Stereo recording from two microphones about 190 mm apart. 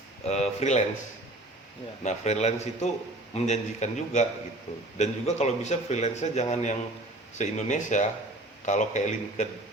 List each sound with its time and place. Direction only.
0.3 s speech: 35° left (ahead or behind)
2.0 s speech: 35° left (ahead or behind)